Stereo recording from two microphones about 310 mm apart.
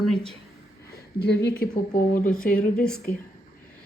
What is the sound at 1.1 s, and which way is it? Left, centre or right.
Speech, left.